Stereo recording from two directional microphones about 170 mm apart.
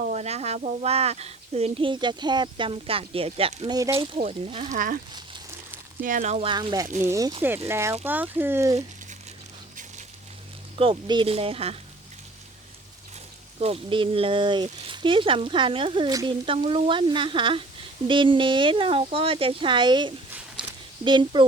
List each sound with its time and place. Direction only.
0.1 s speech: 40° right (ahead or behind)
6.0 s speech: 50° right (ahead or behind); by 8.8 s 15° right (ahead or behind)
10.8 s speech: 30° right (ahead or behind)
13.6 s speech: 35° right (ahead or behind)
20.6 s a sound: 30° right (ahead or behind)